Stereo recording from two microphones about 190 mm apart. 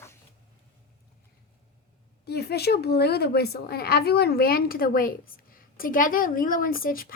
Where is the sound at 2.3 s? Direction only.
60° left (ahead or behind).